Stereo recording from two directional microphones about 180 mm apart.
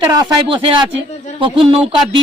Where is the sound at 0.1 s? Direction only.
25° right (ahead or behind).